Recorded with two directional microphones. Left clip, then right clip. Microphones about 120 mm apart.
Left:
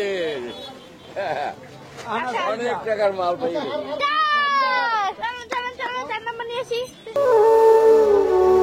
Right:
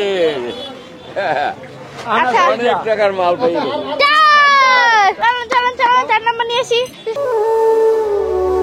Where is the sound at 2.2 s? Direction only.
55° right (ahead or behind).